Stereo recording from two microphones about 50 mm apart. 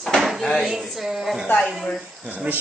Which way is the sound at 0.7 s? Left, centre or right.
Centre.